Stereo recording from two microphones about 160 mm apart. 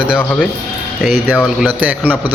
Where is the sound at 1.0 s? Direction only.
Centre (ahead or behind).